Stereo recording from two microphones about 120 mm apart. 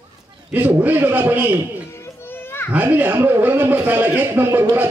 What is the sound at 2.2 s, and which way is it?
Children playing, 20° left (ahead or behind).